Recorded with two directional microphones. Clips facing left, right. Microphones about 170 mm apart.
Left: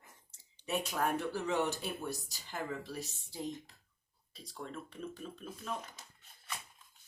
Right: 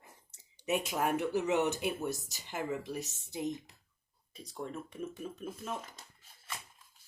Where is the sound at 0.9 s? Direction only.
20° right (ahead or behind).